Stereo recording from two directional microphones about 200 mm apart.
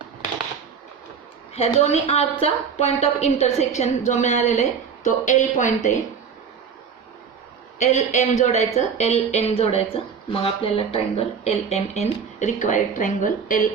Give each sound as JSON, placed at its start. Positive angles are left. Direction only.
{"t": 1.5, "sound": "speech", "side_deg": 30}
{"t": 7.8, "sound": "speech", "side_deg": 35}